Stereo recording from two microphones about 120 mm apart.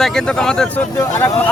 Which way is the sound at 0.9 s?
15° left (ahead or behind).